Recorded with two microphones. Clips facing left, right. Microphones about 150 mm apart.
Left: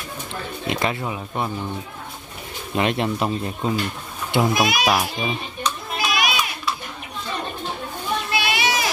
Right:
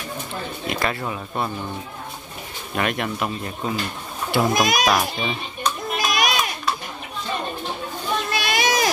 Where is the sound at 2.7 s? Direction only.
25° left (ahead or behind).